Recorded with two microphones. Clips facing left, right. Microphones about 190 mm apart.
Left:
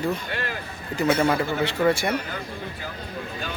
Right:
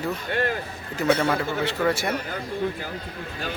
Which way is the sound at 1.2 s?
Centre (ahead or behind).